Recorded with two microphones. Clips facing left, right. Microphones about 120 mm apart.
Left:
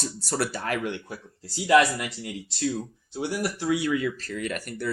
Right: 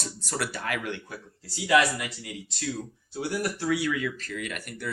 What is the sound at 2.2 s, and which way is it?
Speech, 30° left (ahead or behind).